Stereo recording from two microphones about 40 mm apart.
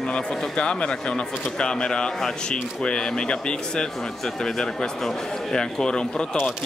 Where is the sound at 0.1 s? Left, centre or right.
Left.